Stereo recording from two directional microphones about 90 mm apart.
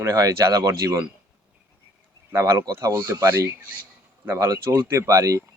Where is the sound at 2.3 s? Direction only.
30° right (ahead or behind).